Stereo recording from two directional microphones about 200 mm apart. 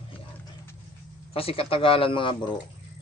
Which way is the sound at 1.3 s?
30° left (ahead or behind).